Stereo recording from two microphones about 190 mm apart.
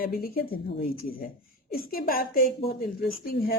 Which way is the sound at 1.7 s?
50° left (ahead or behind).